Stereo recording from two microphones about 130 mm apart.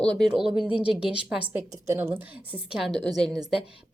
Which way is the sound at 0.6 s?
10° right (ahead or behind).